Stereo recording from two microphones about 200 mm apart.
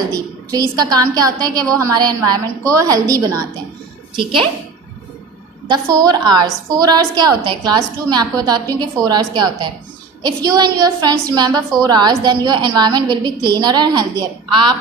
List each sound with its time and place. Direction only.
0.1 s a woman's voice: 20° right (ahead or behind)
5.7 s a woman's voice: 20° right (ahead or behind)